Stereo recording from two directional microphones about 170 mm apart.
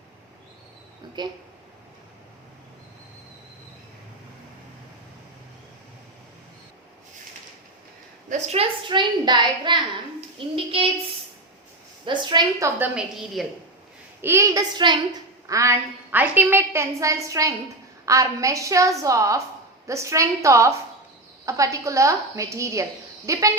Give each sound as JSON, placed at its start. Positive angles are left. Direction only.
{"t": 1.2, "sound": "a woman's voice", "side_deg": -25}
{"t": 8.3, "sound": "a woman's voice", "side_deg": -35}
{"t": 12.0, "sound": "a woman's voice", "side_deg": -25}
{"t": 14.2, "sound": "a woman's voice", "side_deg": -15}